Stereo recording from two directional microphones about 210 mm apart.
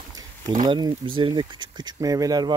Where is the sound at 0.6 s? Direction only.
20° right (ahead or behind).